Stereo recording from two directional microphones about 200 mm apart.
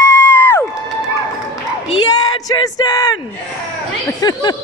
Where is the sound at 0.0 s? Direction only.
10° left (ahead or behind).